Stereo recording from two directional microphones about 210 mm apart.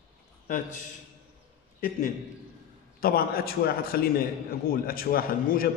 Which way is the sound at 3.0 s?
45° left (ahead or behind).